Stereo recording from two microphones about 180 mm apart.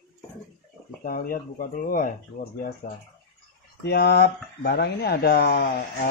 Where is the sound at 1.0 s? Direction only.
50° left (ahead or behind).